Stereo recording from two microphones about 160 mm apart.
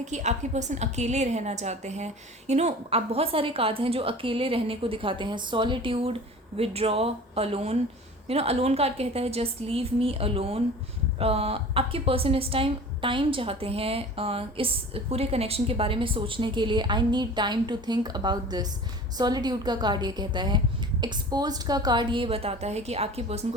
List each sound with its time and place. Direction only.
0.0 s a woman's voice: 45° right (ahead or behind)